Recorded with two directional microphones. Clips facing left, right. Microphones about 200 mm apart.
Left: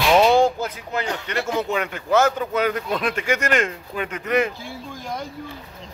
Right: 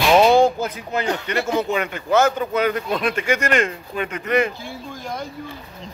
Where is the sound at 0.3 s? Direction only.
20° right (ahead or behind).